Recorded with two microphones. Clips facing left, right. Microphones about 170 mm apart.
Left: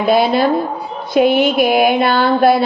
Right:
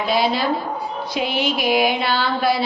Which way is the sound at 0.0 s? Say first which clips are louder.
Left 7 dB; 55° left (ahead or behind).